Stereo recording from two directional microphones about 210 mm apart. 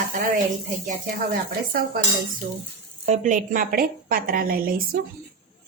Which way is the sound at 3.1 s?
35° right (ahead or behind).